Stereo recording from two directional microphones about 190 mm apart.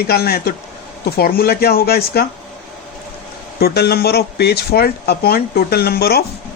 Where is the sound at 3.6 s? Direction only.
55° left (ahead or behind).